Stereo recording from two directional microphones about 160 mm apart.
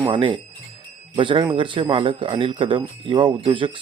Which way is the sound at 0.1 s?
30° right (ahead or behind).